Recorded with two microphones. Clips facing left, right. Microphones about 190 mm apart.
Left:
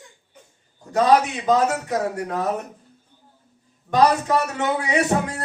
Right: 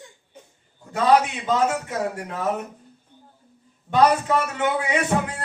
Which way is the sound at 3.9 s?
40° left (ahead or behind).